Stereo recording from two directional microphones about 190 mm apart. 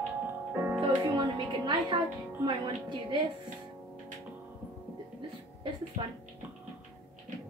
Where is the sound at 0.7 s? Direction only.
25° right (ahead or behind).